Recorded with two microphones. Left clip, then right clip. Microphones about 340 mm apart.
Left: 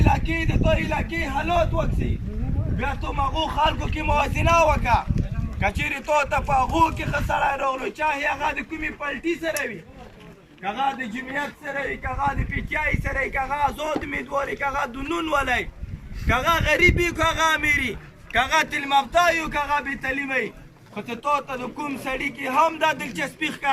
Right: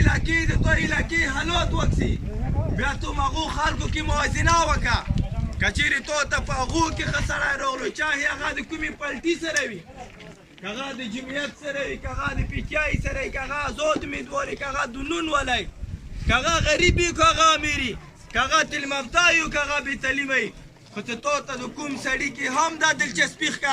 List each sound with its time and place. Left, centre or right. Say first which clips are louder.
0.0 s speech: even; centre
2.8 s speech: left 1 dB; centre
12.5 s speech: even; centre